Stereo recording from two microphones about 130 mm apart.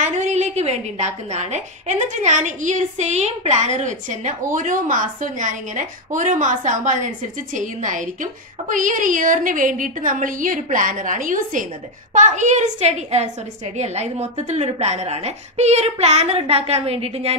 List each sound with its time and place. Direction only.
0.0 s a woman's voice: 65° right (ahead or behind); by 11.6 s 90° right
12.1 s a woman's voice: 70° right (ahead or behind); by 17.4 s 50° right (ahead or behind)